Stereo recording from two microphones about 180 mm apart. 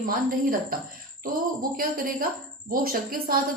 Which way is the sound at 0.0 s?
50° right (ahead or behind).